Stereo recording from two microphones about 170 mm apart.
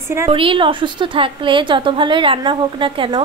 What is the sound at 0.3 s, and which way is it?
Speech, 30° right (ahead or behind).